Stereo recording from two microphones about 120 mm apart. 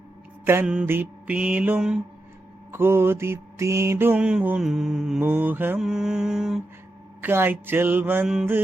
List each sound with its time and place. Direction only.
0.4 s mantra: 20° right (ahead or behind)
5.2 s mantra: 15° right (ahead or behind)
5.8 s mantra: 5° right (ahead or behind)
7.2 s mantra: 15° right (ahead or behind)